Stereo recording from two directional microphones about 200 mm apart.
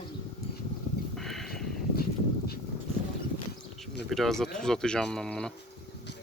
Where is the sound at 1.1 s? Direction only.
Centre (ahead or behind).